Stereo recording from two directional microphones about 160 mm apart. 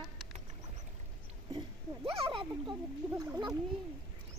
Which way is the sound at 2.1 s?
35° right (ahead or behind).